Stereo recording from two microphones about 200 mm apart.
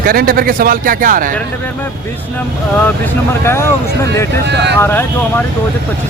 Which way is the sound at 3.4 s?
10° left (ahead or behind).